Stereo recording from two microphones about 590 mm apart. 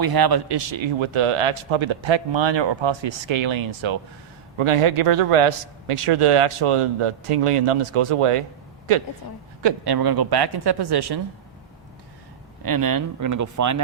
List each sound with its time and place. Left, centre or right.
0.0 s a man's voice: right
9.6 s a woman's voice: right
12.6 s speech: right